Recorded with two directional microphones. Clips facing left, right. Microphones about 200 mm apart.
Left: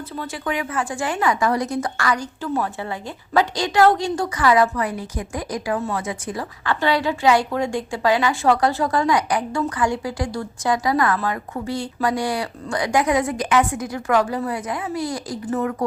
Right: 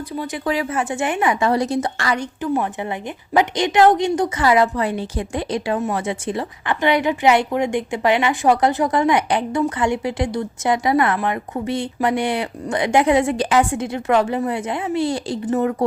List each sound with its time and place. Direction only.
0.4 s a woman's voice: 30° right (ahead or behind)